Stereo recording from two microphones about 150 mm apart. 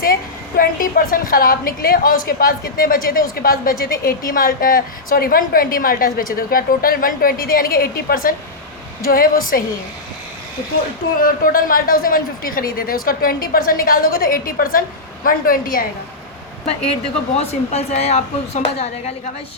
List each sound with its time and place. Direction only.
0.0 s speech: 80° left
11.2 s speech: 70° left (ahead or behind)
17.3 s speech: 45° left (ahead or behind)